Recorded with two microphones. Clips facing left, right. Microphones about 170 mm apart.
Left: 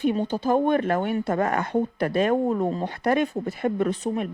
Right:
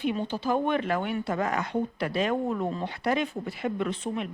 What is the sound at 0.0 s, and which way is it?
Speech, 45° left (ahead or behind).